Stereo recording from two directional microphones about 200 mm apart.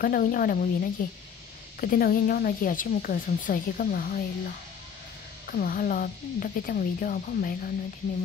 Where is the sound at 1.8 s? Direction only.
45° left (ahead or behind).